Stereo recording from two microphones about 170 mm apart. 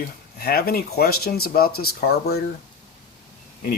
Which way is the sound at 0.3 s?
65° left (ahead or behind).